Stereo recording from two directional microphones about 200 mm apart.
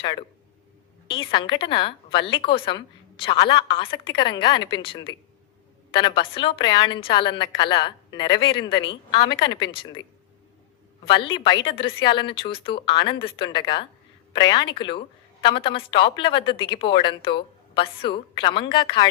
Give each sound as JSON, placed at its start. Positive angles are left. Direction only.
{"t": 0.0, "sound": "a woman's voice", "side_deg": 20}
{"t": 11.0, "sound": "a woman's voice", "side_deg": 25}